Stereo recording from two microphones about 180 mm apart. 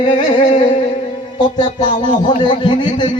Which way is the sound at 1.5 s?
25° left (ahead or behind).